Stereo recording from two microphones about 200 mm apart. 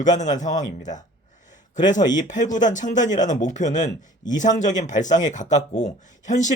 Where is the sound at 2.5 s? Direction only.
40° left (ahead or behind).